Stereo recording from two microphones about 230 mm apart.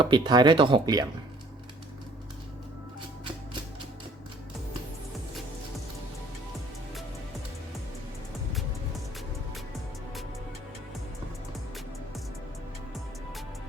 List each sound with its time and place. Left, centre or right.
0.0 s speech: centre